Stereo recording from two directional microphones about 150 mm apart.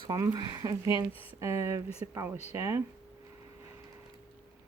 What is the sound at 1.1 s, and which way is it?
Speech, 40° left (ahead or behind).